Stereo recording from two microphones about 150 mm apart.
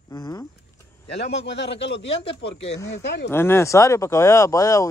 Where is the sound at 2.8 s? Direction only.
15° left (ahead or behind).